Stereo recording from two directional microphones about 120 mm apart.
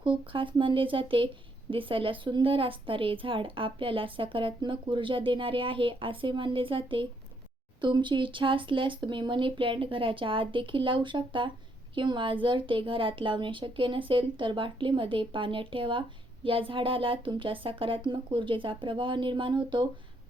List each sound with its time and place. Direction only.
0.0 s a woman's voice: 45° right (ahead or behind)